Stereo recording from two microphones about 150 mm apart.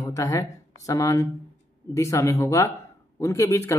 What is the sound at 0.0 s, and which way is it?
A man's voice, 20° left (ahead or behind).